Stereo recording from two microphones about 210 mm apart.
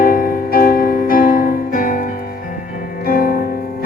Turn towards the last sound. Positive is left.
turn(degrees=45)  # may be behind; listen again after turning